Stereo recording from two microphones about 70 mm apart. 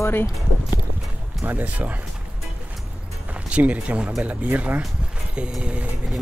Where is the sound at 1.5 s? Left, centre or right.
Right.